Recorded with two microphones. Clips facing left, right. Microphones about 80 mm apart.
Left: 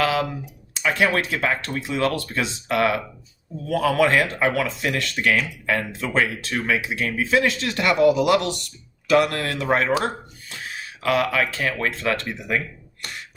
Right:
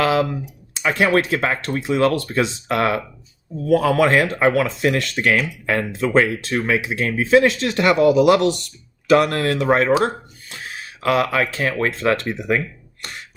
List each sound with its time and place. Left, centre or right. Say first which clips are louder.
0.0 s a sound: right 4 dB; right
0.9 s speech: right 4 dB; right
11.0 s speech: right 3 dB; right